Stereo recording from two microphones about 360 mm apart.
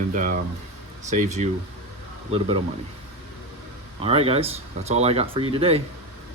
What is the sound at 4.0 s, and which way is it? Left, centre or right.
Speech, centre.